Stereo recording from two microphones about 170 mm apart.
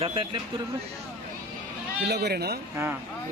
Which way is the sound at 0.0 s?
30° right (ahead or behind).